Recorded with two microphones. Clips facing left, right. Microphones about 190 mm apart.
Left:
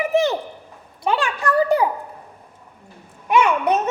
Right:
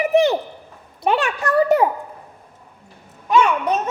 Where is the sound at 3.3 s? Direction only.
20° left (ahead or behind).